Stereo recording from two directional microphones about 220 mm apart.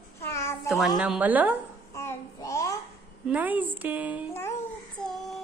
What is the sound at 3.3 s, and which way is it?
Speech, 5° right (ahead or behind).